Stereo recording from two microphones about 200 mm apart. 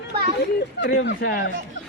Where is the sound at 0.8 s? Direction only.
60° left (ahead or behind).